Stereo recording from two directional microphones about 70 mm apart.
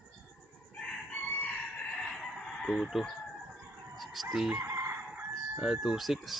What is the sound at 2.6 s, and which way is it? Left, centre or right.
Speech, centre.